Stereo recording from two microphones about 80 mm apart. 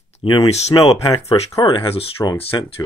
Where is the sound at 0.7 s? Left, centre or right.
Left.